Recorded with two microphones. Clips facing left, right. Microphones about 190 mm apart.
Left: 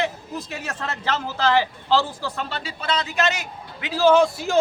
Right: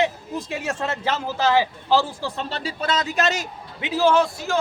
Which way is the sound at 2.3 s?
35° right (ahead or behind).